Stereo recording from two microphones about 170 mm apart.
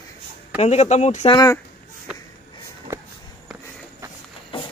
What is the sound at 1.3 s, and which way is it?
Speech, 20° left (ahead or behind).